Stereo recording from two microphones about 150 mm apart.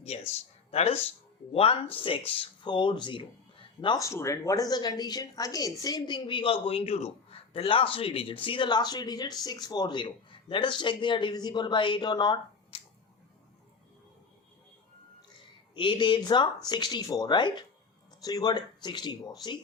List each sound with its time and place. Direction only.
0.1 s speech: 45° left (ahead or behind)
4.0 s a woman's voice: 20° left (ahead or behind)
15.7 s a woman's voice: 35° left (ahead or behind)